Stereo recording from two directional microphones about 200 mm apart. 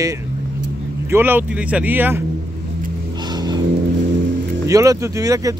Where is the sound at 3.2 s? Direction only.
20° right (ahead or behind).